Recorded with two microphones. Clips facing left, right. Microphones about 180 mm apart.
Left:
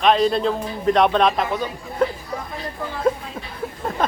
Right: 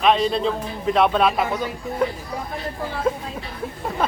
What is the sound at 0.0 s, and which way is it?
A man's voice, centre (ahead or behind).